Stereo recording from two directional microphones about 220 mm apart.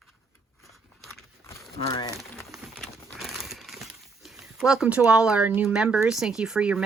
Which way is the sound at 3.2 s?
Centre (ahead or behind).